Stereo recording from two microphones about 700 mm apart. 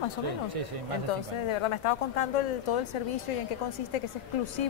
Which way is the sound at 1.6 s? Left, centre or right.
Left.